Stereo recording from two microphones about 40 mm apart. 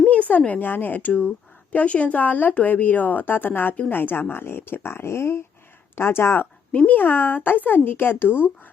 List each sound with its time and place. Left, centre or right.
0.1 s speech: left
0.7 s speech: left
1.7 s a woman's voice: left
6.8 s speech: left